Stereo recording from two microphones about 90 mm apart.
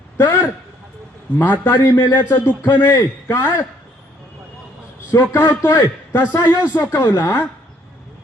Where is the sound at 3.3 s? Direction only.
25° left (ahead or behind).